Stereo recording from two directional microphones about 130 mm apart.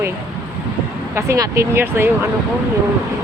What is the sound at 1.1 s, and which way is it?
Speech, 20° right (ahead or behind).